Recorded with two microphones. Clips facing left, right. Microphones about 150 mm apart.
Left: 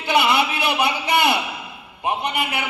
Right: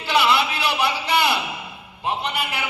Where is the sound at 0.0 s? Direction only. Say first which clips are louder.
Left 1 dB; 20° left (ahead or behind).